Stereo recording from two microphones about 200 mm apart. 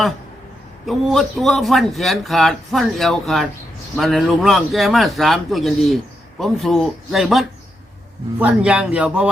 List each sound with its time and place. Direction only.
0.9 s a man's voice: centre (ahead or behind)